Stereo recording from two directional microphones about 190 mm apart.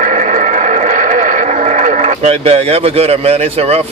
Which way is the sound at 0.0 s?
40° right (ahead or behind).